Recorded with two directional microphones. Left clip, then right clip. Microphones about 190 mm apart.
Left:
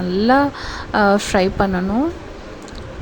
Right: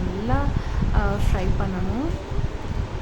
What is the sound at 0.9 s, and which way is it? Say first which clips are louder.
Speech: left 14 dB; 40° left (ahead or behind).